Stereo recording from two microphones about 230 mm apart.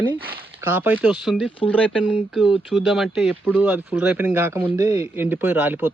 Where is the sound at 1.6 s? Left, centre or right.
Left.